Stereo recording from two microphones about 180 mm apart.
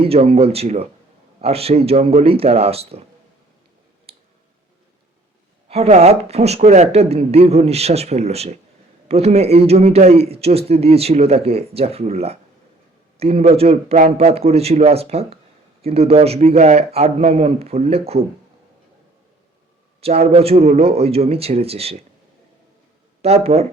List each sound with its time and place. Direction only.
0.0 s speech: 35° right (ahead or behind)
4.1 s clicking: 35° right (ahead or behind)
5.6 s speech: 35° right (ahead or behind)
20.0 s speech: 35° right (ahead or behind)
23.2 s speech: 35° right (ahead or behind)